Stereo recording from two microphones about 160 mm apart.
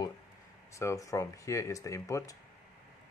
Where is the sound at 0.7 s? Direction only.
20° left (ahead or behind).